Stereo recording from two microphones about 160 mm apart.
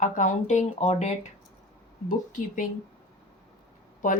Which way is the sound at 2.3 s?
55° left (ahead or behind).